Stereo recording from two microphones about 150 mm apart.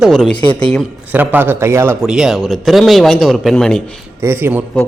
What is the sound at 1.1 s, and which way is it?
Speech, 10° right (ahead or behind).